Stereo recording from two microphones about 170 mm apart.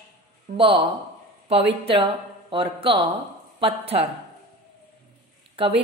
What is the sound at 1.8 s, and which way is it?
A woman's voice, 30° right (ahead or behind).